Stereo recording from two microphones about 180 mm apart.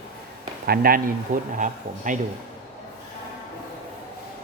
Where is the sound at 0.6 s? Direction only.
55° right (ahead or behind).